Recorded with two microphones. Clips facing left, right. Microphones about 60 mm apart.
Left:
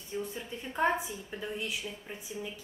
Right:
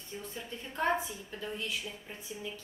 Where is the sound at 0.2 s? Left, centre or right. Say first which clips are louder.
Left 5 dB; centre.